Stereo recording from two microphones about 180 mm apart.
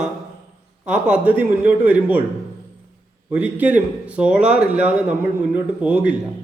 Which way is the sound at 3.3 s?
10° right (ahead or behind).